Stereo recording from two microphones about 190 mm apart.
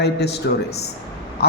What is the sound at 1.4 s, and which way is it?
Speech, 60° left (ahead or behind).